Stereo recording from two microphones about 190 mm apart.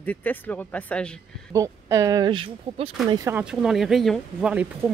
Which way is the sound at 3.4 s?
5° right (ahead or behind).